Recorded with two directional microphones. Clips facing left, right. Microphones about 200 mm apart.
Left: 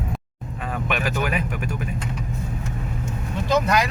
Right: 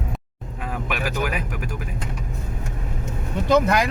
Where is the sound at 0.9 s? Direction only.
10° right (ahead or behind).